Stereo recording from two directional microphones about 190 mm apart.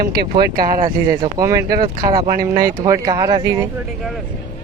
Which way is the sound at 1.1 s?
20° right (ahead or behind).